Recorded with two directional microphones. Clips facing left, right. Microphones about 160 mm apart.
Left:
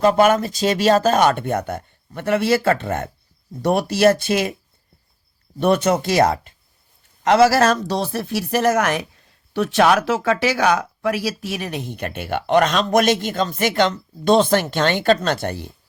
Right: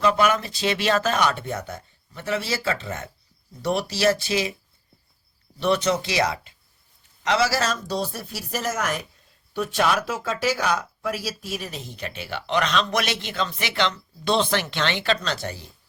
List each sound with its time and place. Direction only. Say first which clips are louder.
0.0 s speech: left 6 dB; 45° left (ahead or behind)
5.5 s speech: left 5 dB; 50° left (ahead or behind)